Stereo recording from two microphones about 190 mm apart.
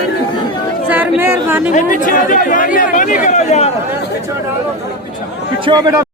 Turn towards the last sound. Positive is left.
turn(degrees=-20)  # may be behind; listen again after turning